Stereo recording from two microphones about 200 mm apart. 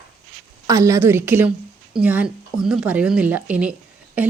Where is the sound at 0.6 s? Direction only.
15° right (ahead or behind).